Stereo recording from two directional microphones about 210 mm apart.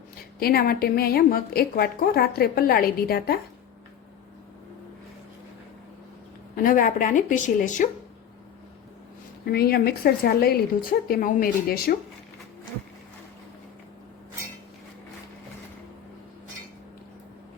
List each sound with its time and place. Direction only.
0.3 s a woman's voice: 45° left (ahead or behind)
6.6 s speech: 40° left (ahead or behind)
9.5 s a woman's voice: 50° left (ahead or behind)